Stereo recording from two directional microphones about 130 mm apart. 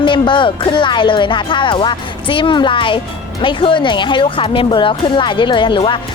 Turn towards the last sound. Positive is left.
turn(degrees=40)  # may be behind; listen again after turning